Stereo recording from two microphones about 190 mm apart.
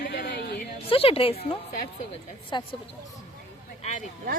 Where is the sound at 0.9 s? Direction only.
30° left (ahead or behind).